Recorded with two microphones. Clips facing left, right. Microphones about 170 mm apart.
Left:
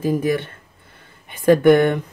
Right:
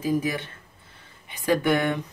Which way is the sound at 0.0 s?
55° left (ahead or behind).